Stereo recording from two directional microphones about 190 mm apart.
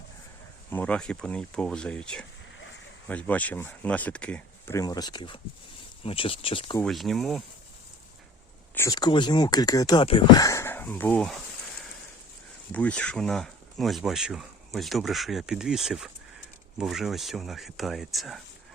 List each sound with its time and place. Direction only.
0.7 s speech: 10° left (ahead or behind); by 6.7 s 25° left (ahead or behind)
6.8 s speech: centre (ahead or behind)
8.7 s speech: 15° left (ahead or behind)
12.7 s speech: 5° left (ahead or behind)